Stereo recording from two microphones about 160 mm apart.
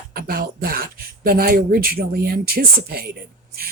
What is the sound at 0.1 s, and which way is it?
Speech, 70° right (ahead or behind).